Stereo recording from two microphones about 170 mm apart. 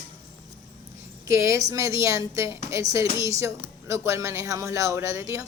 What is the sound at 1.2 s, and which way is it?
Speech, 15° right (ahead or behind).